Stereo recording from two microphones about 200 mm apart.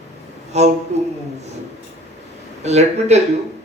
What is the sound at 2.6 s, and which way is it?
Speech, 35° right (ahead or behind).